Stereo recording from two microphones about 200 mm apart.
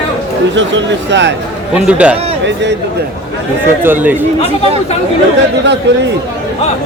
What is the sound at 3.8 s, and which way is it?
Speech, 10° right (ahead or behind).